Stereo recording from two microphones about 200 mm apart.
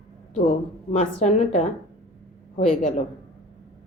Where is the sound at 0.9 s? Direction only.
30° left (ahead or behind).